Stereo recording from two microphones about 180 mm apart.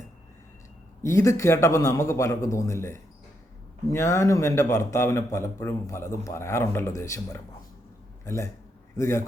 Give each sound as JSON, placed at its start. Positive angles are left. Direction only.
{"t": 1.0, "sound": "a man's voice", "side_deg": 15}